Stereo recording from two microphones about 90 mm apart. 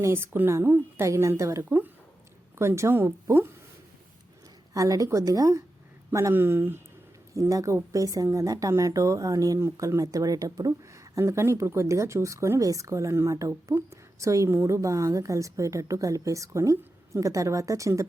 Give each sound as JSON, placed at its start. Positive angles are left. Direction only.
{"t": 0.0, "sound": "a woman's voice", "side_deg": -25}
{"t": 4.7, "sound": "a woman's voice", "side_deg": -40}
{"t": 7.3, "sound": "speech", "side_deg": -35}